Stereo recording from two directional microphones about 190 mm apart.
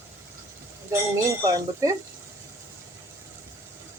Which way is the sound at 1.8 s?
15° right (ahead or behind).